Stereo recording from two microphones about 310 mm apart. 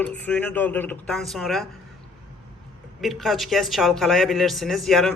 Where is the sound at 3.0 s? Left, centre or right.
Centre.